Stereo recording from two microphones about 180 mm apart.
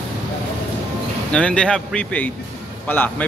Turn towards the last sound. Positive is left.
turn(degrees=10)  # may be behind; listen again after turning